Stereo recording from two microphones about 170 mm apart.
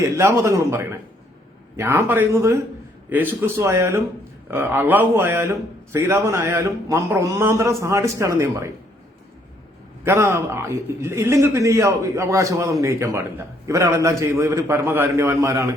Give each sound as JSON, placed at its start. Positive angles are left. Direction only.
{"t": 0.0, "sound": "a man's voice", "side_deg": -15}
{"t": 10.0, "sound": "a man's voice", "side_deg": -15}